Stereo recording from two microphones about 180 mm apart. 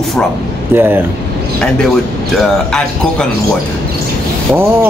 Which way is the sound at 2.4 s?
5° left (ahead or behind).